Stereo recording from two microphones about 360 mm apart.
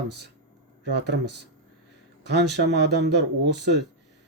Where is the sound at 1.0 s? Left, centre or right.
Right.